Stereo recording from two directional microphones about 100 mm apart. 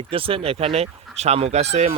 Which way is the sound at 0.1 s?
65° right (ahead or behind).